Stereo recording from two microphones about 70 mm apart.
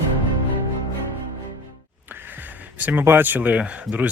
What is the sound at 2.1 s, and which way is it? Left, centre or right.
Speech, right.